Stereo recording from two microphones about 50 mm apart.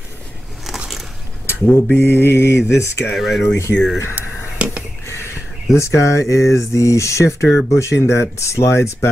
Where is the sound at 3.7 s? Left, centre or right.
Left.